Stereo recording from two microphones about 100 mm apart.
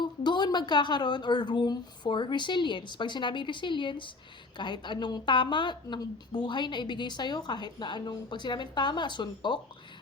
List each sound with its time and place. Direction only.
0.0 s a woman's voice: 45° left (ahead or behind)